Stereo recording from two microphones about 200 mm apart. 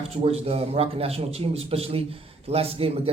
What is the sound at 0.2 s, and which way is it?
A man's voice, 30° right (ahead or behind).